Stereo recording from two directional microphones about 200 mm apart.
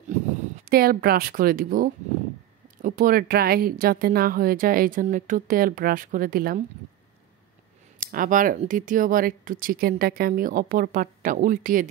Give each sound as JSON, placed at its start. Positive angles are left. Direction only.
{"t": 0.7, "sound": "speech", "side_deg": -50}
{"t": 8.0, "sound": "speech", "side_deg": -45}